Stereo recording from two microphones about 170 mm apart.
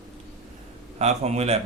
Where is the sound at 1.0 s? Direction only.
40° right (ahead or behind).